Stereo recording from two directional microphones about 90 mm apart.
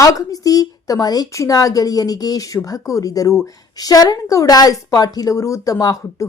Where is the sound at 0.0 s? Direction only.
40° left (ahead or behind).